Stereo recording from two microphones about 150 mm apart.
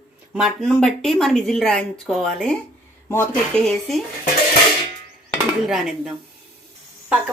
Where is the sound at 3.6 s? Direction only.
5° left (ahead or behind).